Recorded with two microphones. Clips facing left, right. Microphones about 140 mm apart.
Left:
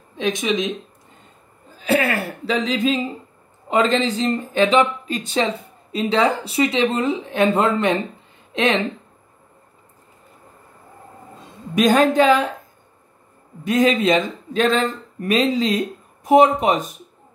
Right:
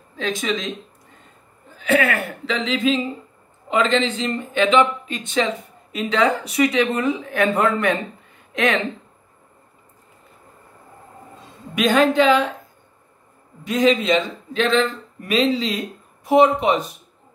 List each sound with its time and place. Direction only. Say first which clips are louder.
0.1 s speech: left 3 dB; 20° left (ahead or behind)
1.8 s speech: even; 35° left (ahead or behind)
11.7 s speech: left 1 dB; 40° left (ahead or behind)
13.7 s speech: left 1 dB; 45° left (ahead or behind)